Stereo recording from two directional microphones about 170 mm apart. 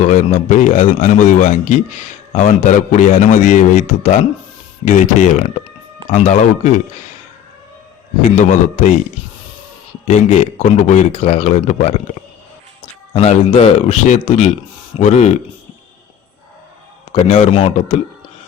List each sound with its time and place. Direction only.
0.0 s a man's voice: 45° left (ahead or behind)
8.4 s a man's voice: 50° left (ahead or behind)
10.1 s a man's voice: 45° left (ahead or behind)
17.1 s speech: 35° left (ahead or behind)